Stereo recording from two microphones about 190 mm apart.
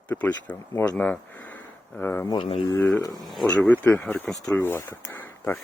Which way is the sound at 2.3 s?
25° left (ahead or behind).